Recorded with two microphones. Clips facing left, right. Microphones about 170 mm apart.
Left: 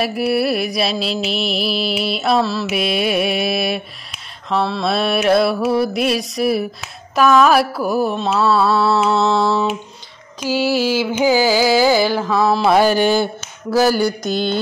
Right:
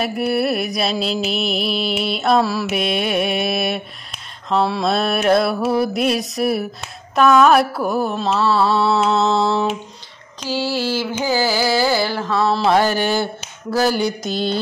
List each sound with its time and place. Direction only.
0.0 s music: 5° left (ahead or behind)
2.6 s mantra: 5° left (ahead or behind)
4.8 s music: centre (ahead or behind)
8.5 s mantra: 15° right (ahead or behind)
8.8 s music: centre (ahead or behind)
10.4 s carnatic music: 10° left (ahead or behind)
12.7 s carnatic music: 15° left (ahead or behind)
14.0 s mantra: 30° right (ahead or behind)